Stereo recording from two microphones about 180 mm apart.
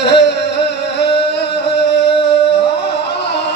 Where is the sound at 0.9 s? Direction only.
70° left (ahead or behind).